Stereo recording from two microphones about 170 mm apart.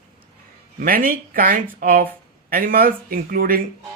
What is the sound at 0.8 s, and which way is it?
Speech, 55° right (ahead or behind).